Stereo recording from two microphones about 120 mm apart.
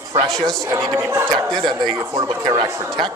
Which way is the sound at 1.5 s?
35° right (ahead or behind).